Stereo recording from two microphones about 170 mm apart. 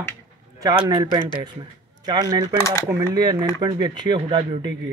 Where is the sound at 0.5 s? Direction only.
25° right (ahead or behind).